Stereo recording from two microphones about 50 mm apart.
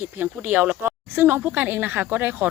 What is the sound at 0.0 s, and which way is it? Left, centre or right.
Speech, right.